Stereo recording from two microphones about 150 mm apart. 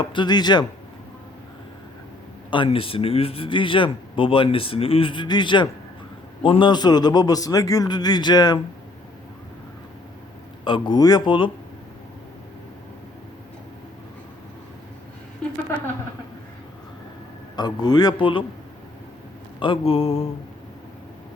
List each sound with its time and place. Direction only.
0.0 s a man's voice: 30° left (ahead or behind)
2.5 s a man's voice: 35° left (ahead or behind)
10.6 s speech: 35° left (ahead or behind)
17.6 s a man's voice: 30° left (ahead or behind)
19.5 s speech: 35° left (ahead or behind)